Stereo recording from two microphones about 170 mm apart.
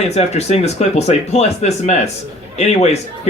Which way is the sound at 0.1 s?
40° left (ahead or behind).